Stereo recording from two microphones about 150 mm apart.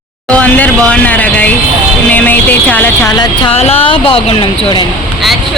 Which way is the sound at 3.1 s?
30° left (ahead or behind).